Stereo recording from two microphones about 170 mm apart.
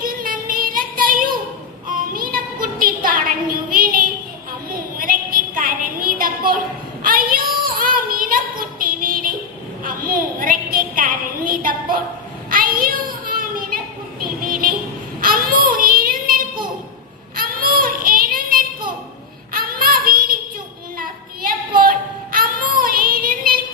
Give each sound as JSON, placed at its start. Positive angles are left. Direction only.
{"t": 0.0, "sound": "music", "side_deg": -55}
{"t": 1.9, "sound": "child singing", "side_deg": -55}
{"t": 4.7, "sound": "a sound", "side_deg": -55}
{"t": 7.0, "sound": "child singing", "side_deg": -55}
{"t": 8.8, "sound": "music", "side_deg": -55}
{"t": 9.8, "sound": "a sound", "side_deg": -55}
{"t": 15.2, "sound": "child singing", "side_deg": -55}
{"t": 17.3, "sound": "child singing", "side_deg": -55}